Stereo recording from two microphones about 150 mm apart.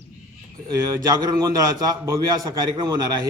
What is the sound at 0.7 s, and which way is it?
A man's voice, 25° right (ahead or behind).